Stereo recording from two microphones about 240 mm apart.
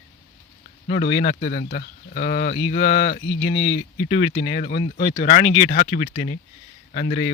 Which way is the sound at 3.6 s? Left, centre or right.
Left.